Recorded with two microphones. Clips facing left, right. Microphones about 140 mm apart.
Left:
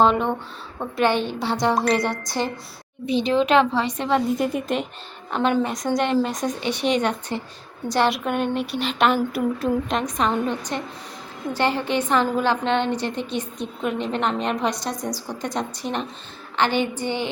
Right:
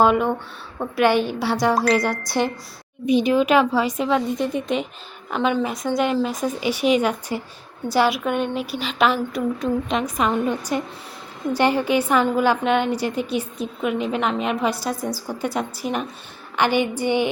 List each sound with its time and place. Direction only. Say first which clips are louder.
0.0 s a woman's voice: right 1 dB; 5° right (ahead or behind)
2.4 s a woman's voice: right 3 dB; 15° right (ahead or behind)